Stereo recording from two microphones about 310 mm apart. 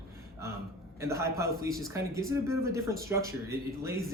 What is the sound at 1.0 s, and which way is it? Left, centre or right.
Speech, centre.